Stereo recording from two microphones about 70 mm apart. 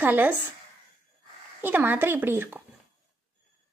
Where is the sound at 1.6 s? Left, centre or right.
Right.